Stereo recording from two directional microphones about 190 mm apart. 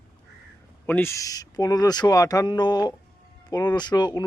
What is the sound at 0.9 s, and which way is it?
Speech, 10° left (ahead or behind).